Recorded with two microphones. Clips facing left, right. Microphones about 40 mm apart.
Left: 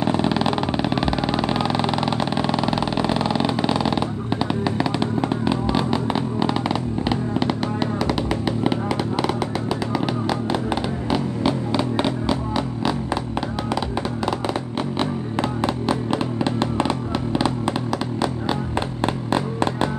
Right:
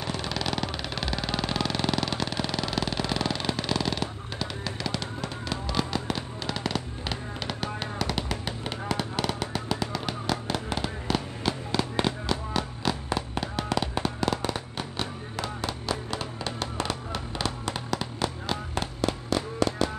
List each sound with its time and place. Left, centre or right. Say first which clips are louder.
0.0 s vehicle: left 11 dB; left; by 9.3 s centre
9.7 s music: left 7 dB; centre
14.8 s music: left 10 dB; left
19.3 s music: left 4 dB; left